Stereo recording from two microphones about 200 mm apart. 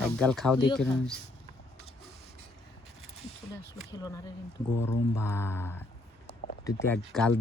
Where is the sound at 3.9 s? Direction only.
20° left (ahead or behind).